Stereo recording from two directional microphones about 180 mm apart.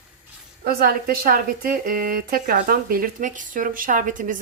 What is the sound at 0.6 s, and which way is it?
A woman's voice, 55° right (ahead or behind).